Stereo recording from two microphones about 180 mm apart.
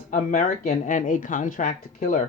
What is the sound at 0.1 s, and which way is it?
Speech, 45° left (ahead or behind).